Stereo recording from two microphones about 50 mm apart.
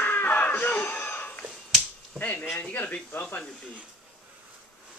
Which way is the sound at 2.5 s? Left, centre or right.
Left.